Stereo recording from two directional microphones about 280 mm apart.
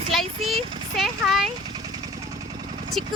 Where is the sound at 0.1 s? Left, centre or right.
Centre.